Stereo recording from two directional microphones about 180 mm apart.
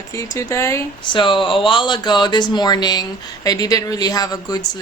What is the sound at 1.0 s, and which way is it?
Speech, 25° left (ahead or behind).